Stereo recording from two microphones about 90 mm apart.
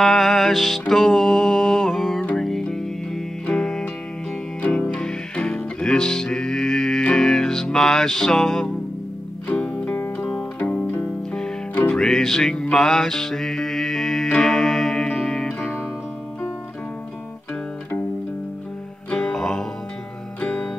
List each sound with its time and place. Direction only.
0.0 s music: centre (ahead or behind)
9.9 s music: 20° left (ahead or behind)
11.3 s music: 10° left (ahead or behind)
19.0 s music: 5° left (ahead or behind)